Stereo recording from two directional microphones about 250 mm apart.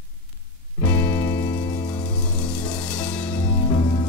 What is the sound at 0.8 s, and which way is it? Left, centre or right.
Music, centre.